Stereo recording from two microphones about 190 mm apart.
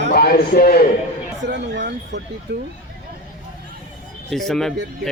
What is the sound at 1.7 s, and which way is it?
Speech, 65° right (ahead or behind).